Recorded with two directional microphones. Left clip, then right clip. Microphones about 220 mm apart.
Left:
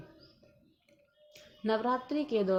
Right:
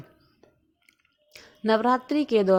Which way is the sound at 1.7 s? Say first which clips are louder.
Right 9 dB; 30° right (ahead or behind).